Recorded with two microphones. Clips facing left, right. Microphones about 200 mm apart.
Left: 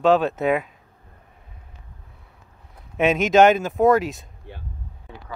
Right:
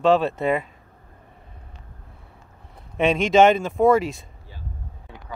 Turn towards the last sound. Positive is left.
turn(degrees=0)  # may be behind; listen again after turning